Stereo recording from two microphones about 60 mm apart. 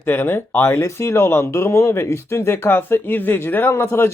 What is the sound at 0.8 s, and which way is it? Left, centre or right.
Speech, left.